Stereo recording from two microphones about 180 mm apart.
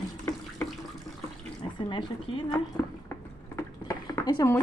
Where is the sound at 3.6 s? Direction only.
15° left (ahead or behind).